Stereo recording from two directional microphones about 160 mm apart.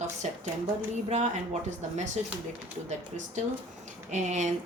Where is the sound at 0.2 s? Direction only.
45° right (ahead or behind).